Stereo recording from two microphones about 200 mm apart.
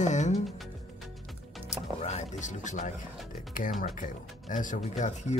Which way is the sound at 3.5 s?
40° left (ahead or behind).